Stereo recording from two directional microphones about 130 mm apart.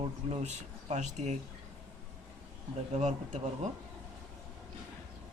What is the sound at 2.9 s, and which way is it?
Speech, 60° right (ahead or behind).